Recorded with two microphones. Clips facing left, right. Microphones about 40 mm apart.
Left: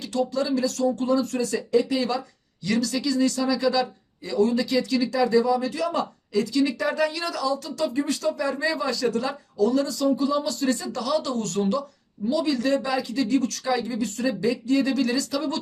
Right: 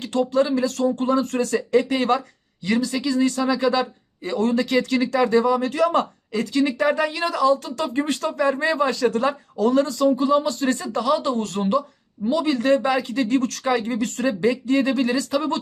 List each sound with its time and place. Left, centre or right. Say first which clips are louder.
0.0 s speech: right 5 dB; right
2.6 s speech: right 2 dB; right
12.2 s speech: right 3 dB; right